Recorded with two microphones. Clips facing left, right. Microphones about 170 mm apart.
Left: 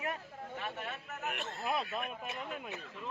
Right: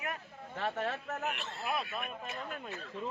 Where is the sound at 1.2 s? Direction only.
45° left (ahead or behind).